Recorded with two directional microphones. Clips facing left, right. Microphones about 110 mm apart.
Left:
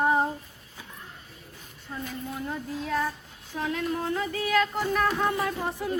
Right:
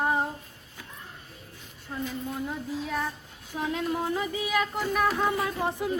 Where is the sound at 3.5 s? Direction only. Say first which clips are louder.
Even; 15° right (ahead or behind).